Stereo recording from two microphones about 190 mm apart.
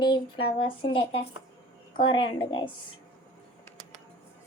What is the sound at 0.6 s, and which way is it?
A woman's voice, 25° left (ahead or behind).